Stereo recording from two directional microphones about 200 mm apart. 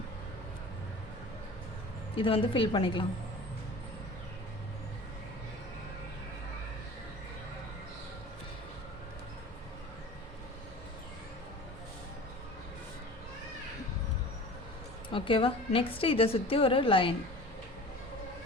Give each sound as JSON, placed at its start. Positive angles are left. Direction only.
{"t": 2.1, "sound": "a woman's voice", "side_deg": 25}
{"t": 15.1, "sound": "a woman's voice", "side_deg": 25}